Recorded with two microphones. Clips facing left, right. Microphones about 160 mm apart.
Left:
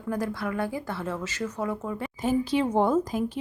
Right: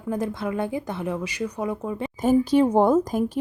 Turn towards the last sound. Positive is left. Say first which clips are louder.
# right 4 dB
turn(degrees=-45)  # may be behind; listen again after turning